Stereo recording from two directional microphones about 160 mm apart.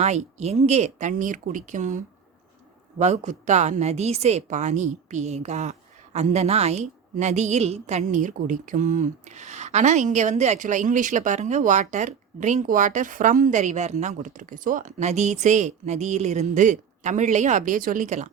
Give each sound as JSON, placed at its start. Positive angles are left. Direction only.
{"t": 0.0, "sound": "a woman's voice", "side_deg": -45}